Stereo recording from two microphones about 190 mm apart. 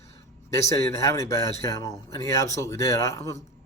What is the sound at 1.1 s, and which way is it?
Speech, 15° left (ahead or behind).